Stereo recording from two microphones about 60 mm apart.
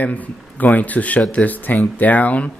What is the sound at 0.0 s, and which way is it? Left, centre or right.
Speech, left.